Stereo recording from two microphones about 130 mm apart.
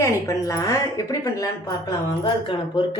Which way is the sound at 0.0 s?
25° left (ahead or behind).